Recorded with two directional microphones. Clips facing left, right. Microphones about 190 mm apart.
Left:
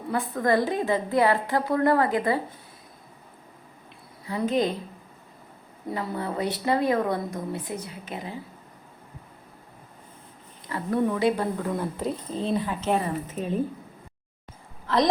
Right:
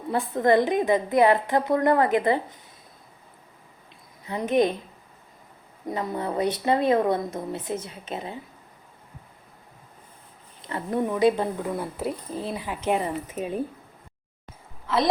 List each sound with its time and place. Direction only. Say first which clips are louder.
0.1 s a woman's voice: right 3 dB; 25° right (ahead or behind)
4.3 s a woman's voice: right 2 dB; 20° right (ahead or behind)
5.9 s a woman's voice: right 2 dB; 20° right (ahead or behind)
10.6 s a woman's voice: left 1 dB; 25° right (ahead or behind)
11.7 s speech: left 1 dB; 10° right (ahead or behind)
14.8 s speech: even; 5° right (ahead or behind)